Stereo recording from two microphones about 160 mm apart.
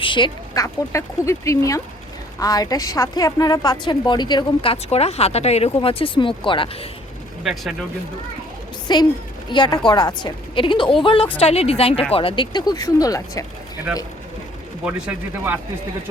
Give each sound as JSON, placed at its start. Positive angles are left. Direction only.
{"t": 0.0, "sound": "a woman's voice", "side_deg": 30}
{"t": 7.4, "sound": "speech", "side_deg": 0}
{"t": 8.9, "sound": "a woman's voice", "side_deg": 25}
{"t": 14.8, "sound": "speech", "side_deg": -10}